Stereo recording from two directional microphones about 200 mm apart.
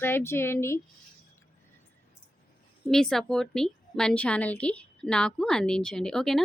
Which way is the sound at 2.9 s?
Centre (ahead or behind).